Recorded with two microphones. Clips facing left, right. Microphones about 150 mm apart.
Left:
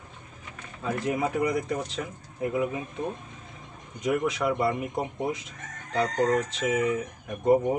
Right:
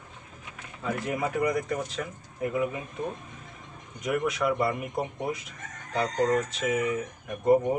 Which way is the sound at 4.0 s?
20° left (ahead or behind).